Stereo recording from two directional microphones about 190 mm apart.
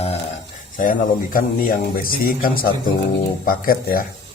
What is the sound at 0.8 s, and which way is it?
Speech, 45° left (ahead or behind).